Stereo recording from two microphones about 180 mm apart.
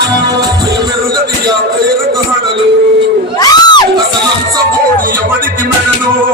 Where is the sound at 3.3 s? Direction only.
20° left (ahead or behind).